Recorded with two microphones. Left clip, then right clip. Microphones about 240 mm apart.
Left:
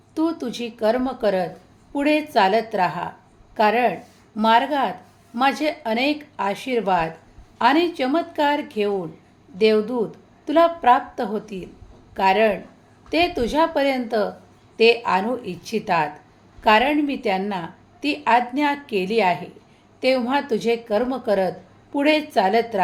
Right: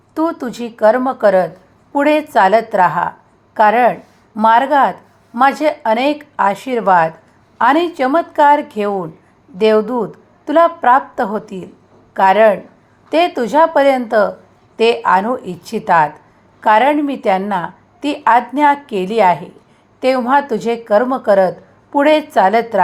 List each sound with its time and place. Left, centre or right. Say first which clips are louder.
0.1 s a woman's voice: right 6 dB; centre